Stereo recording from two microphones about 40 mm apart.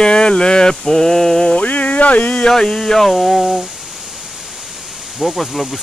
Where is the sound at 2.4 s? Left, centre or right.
Centre.